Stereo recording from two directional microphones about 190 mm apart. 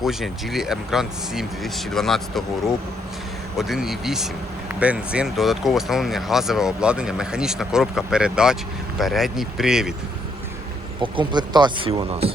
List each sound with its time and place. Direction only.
0.0 s speech: centre (ahead or behind)
3.6 s speech: centre (ahead or behind)
11.0 s speech: 25° right (ahead or behind)